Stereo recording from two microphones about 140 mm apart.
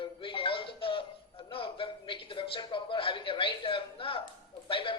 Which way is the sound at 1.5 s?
40° left (ahead or behind).